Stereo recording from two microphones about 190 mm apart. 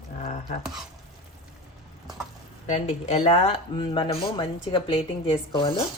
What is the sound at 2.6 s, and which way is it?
Speech, 35° left (ahead or behind).